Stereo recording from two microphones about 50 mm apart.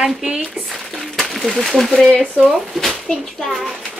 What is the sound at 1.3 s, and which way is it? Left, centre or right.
Speech, centre.